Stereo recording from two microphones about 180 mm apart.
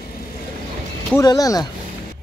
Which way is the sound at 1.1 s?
20° left (ahead or behind).